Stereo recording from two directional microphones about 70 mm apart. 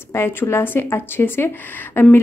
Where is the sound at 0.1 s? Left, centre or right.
Left.